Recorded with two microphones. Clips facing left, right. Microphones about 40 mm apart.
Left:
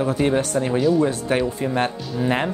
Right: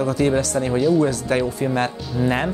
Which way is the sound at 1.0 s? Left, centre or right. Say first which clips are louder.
Right 1 dB; left.